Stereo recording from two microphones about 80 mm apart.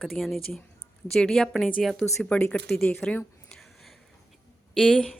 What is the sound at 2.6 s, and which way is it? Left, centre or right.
Speech, centre.